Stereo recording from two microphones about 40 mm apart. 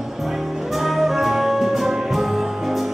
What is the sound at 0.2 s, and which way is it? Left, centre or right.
Music, centre.